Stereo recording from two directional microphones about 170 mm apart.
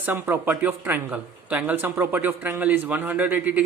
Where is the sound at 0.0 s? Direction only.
10° right (ahead or behind).